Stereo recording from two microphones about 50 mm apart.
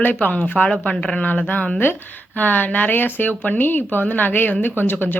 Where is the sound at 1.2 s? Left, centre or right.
Left.